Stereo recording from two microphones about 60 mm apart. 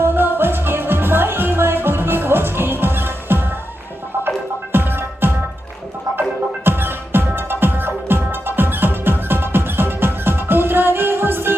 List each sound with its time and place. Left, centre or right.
0.0 s music: right
4.7 s music: right
6.7 s music: right